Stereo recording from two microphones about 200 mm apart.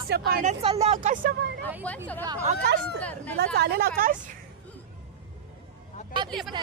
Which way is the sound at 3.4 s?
50° right (ahead or behind).